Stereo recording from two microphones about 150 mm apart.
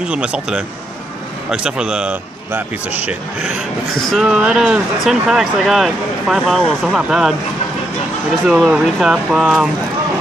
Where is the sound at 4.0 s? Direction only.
Centre (ahead or behind).